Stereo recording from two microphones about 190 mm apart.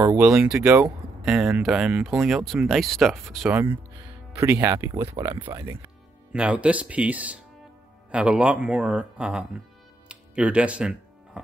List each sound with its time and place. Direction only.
0.0 s speech: 10° right (ahead or behind)
3.5 s speech: 10° right (ahead or behind)
6.3 s speech: 5° right (ahead or behind)
10.0 s music: 5° right (ahead or behind)